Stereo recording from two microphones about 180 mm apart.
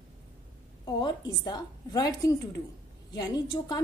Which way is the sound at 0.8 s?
25° left (ahead or behind).